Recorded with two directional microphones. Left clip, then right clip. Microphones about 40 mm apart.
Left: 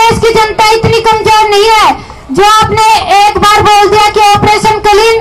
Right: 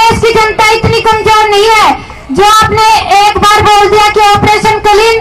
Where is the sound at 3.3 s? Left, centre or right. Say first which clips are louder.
Even; centre.